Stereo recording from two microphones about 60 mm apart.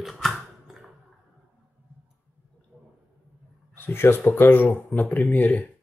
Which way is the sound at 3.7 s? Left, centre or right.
Left.